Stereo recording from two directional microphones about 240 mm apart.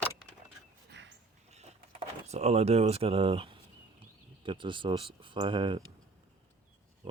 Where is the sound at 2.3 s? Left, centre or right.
Right.